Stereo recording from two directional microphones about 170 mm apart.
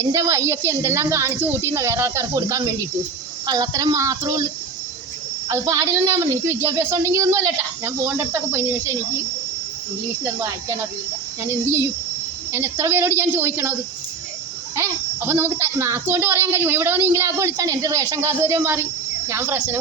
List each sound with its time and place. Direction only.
0.0 s a woman's voice: 20° right (ahead or behind)
5.5 s a woman's voice: 15° right (ahead or behind)
11.4 s a woman's voice: 15° right (ahead or behind)
14.8 s a woman's voice: 15° right (ahead or behind)